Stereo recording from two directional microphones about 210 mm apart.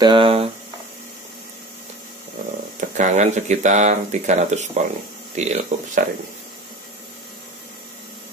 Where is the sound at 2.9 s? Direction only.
35° right (ahead or behind).